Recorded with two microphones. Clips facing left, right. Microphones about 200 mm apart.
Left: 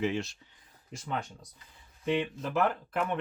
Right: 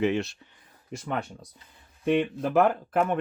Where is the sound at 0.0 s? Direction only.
65° right (ahead or behind).